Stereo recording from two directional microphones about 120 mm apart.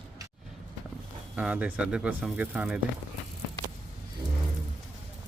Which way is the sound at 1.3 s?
10° right (ahead or behind).